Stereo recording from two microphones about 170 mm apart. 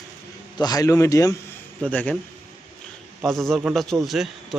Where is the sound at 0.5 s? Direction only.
20° left (ahead or behind).